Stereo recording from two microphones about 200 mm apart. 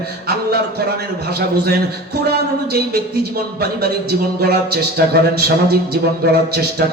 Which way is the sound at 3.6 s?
50° right (ahead or behind).